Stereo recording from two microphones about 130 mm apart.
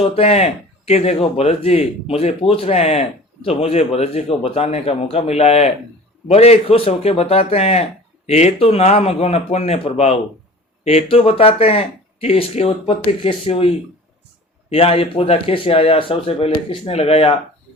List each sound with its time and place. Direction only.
0.0 s speech: 50° left (ahead or behind)
14.7 s speech: 45° left (ahead or behind)